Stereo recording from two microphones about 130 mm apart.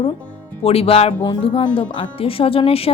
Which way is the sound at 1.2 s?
40° left (ahead or behind).